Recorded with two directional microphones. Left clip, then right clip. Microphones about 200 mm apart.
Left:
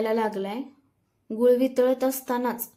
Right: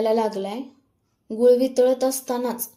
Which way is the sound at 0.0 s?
5° left (ahead or behind).